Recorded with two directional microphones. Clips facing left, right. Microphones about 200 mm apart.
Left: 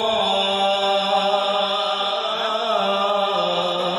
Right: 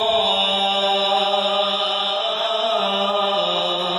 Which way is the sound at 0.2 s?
50° left (ahead or behind).